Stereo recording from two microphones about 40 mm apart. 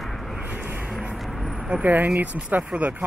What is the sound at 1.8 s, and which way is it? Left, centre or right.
Speech, right.